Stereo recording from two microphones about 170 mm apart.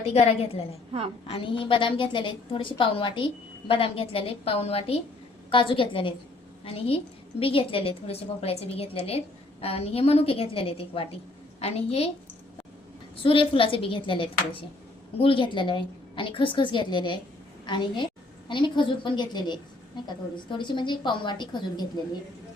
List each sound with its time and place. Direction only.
0.0 s a woman's voice: 40° left (ahead or behind)
13.2 s a woman's voice: 30° left (ahead or behind)